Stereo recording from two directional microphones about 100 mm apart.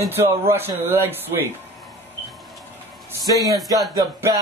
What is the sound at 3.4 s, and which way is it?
Speech, 35° right (ahead or behind).